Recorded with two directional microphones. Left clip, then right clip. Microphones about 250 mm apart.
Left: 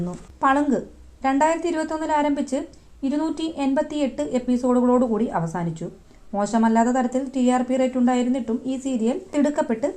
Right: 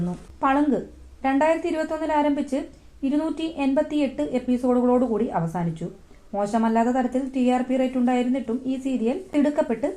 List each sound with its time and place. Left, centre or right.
0.0 s a woman's voice: left